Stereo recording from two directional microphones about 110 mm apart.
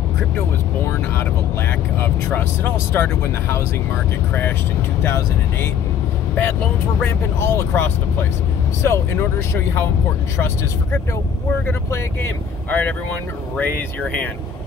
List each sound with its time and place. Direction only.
1.7 s speech: 20° left (ahead or behind)
11.6 s speech: 20° left (ahead or behind)